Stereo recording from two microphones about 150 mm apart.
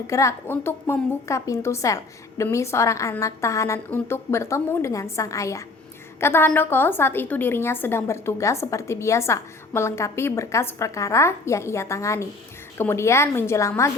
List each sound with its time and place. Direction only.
0.1 s a woman's voice: 20° left (ahead or behind)